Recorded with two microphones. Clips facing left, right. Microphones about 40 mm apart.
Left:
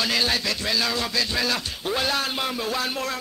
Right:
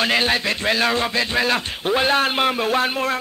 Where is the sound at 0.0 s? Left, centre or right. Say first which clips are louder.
Right 5 dB; right.